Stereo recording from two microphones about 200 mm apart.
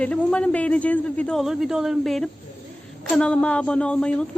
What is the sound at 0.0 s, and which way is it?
A woman's voice, 5° left (ahead or behind).